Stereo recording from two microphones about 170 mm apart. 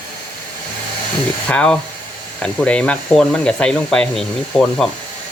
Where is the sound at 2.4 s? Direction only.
5° left (ahead or behind).